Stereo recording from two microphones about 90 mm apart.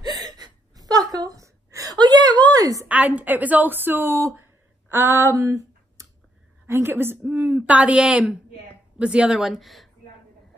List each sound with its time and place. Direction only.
0.0 s gasp: 50° right (ahead or behind)
2.9 s a woman's voice: 15° right (ahead or behind); by 9.8 s centre (ahead or behind)